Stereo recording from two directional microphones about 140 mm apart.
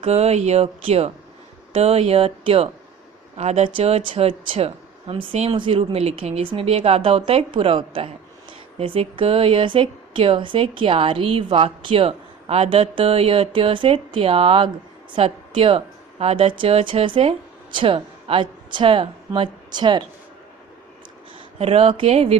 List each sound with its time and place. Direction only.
0.0 s speech: 50° right (ahead or behind); by 20.1 s 35° right (ahead or behind)
21.6 s speech: 45° right (ahead or behind)